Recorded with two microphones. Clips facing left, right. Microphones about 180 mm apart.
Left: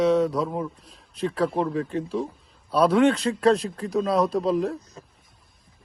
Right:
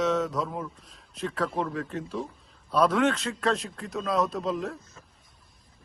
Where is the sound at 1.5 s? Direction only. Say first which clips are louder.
Left 5 dB; 30° left (ahead or behind).